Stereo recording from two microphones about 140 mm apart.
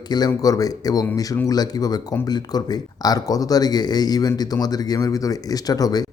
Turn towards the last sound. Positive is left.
turn(degrees=25)  # may be behind; listen again after turning